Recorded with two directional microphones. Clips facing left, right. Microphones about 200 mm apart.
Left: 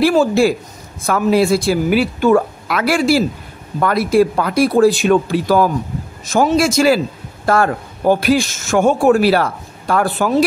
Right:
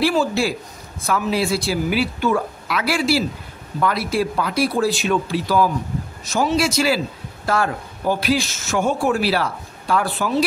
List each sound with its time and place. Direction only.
0.0 s a man's voice: 45° left (ahead or behind)